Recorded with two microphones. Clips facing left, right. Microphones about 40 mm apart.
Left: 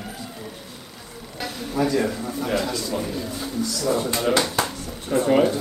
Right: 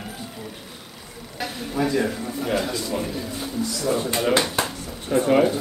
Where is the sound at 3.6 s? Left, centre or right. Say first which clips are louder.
Left 1 dB; right.